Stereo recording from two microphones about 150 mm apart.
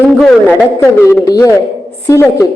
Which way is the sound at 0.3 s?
15° left (ahead or behind).